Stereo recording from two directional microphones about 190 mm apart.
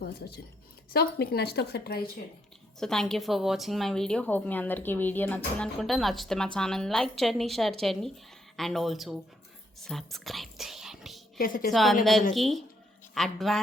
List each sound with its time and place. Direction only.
0.0 s speech: 55° left (ahead or behind)
2.8 s speech: centre (ahead or behind)
11.3 s a woman's voice: 45° left (ahead or behind)
11.7 s speech: centre (ahead or behind)